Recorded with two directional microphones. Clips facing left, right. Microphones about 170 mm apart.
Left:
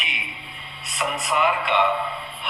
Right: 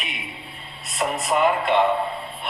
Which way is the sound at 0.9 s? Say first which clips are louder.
Right 3 dB; 45° right (ahead or behind).